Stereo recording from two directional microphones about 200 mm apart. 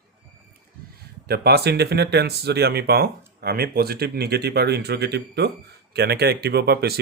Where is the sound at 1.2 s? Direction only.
55° right (ahead or behind).